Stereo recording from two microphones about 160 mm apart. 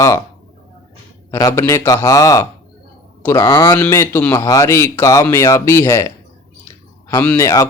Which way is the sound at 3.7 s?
15° left (ahead or behind).